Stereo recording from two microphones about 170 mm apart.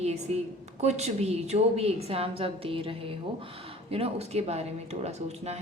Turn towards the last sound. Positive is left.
turn(degrees=-40)  # may be behind; listen again after turning